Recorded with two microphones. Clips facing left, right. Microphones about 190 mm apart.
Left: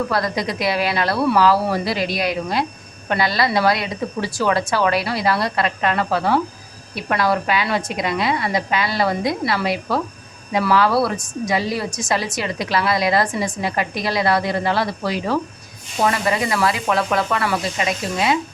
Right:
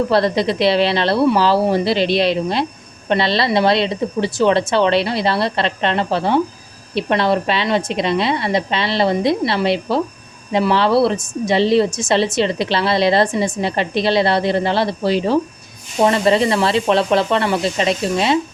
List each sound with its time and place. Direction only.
0.1 s a woman's voice: 25° right (ahead or behind)